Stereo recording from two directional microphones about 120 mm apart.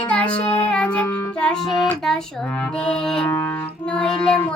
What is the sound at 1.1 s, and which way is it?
Music, 10° left (ahead or behind).